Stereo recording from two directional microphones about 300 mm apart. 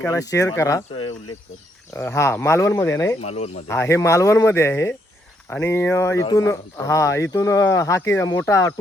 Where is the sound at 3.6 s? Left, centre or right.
Centre.